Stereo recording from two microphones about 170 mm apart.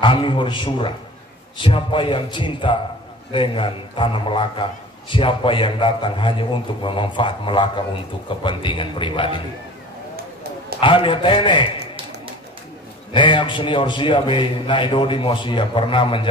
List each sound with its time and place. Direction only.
0.0 s a man's voice: 30° left (ahead or behind)
10.8 s a man's voice: 30° left (ahead or behind)
13.1 s a man's voice: 30° left (ahead or behind)